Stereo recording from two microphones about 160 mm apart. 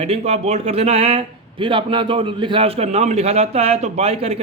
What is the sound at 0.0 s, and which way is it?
Speech, 40° right (ahead or behind).